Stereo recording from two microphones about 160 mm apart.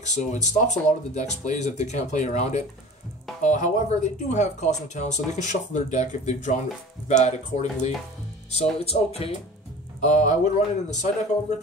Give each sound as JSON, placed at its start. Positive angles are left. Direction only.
{"t": 0.0, "sound": "speech", "side_deg": 50}